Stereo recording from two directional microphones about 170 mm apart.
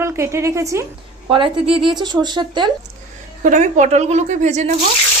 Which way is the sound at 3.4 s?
45° right (ahead or behind).